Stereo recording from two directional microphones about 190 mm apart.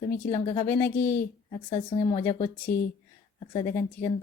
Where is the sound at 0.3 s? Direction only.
35° left (ahead or behind).